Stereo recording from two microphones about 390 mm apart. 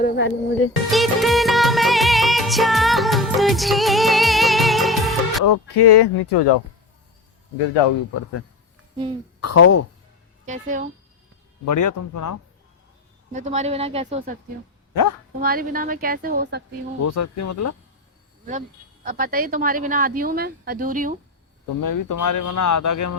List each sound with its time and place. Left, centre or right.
0.0 s music: left
0.9 s music: centre
5.5 s speech: left
9.4 s speech: left
10.4 s speech: centre
11.6 s speech: left
13.3 s speech: centre
15.4 s speech: right
17.0 s speech: left
19.0 s speech: right
21.8 s speech: left